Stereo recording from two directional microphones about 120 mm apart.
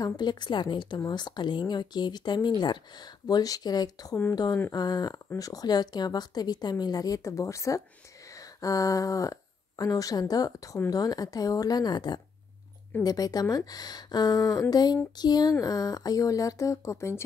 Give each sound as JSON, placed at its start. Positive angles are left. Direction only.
{"t": 0.0, "sound": "a woman's voice", "side_deg": 35}